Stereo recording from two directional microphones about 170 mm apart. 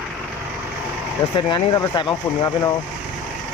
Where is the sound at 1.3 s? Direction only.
25° left (ahead or behind).